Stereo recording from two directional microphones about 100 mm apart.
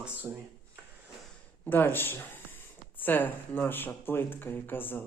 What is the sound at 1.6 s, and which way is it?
Speech, 20° left (ahead or behind).